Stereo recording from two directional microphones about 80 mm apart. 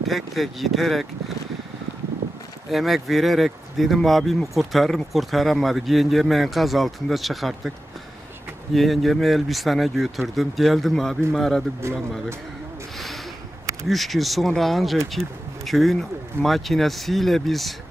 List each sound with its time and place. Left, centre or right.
0.0 s speech: centre
2.7 s speech: centre
8.7 s speech: centre
11.8 s speech: right
12.9 s a sound: centre
13.8 s speech: centre